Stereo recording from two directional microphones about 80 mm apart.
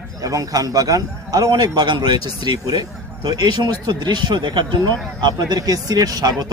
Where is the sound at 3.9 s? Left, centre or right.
Right.